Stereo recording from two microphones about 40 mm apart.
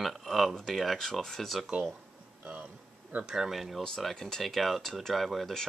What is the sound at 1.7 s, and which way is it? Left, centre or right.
Speech, right.